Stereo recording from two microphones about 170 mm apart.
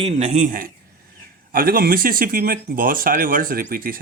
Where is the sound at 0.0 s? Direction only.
40° right (ahead or behind).